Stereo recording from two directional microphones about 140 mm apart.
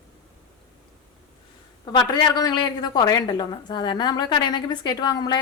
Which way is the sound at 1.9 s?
30° left (ahead or behind).